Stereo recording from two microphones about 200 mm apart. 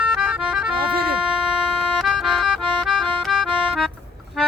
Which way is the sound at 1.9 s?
Centre (ahead or behind).